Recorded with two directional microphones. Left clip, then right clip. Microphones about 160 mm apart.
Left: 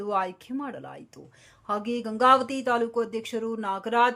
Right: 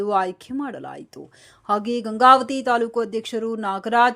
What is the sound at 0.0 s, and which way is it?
Speech, 30° right (ahead or behind).